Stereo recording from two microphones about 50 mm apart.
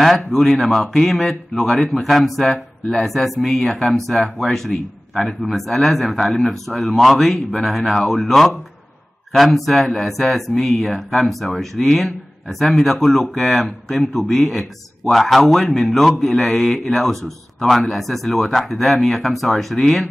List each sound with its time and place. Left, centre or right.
0.0 s speech: centre